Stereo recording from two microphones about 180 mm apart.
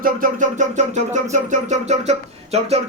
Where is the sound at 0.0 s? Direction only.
50° right (ahead or behind).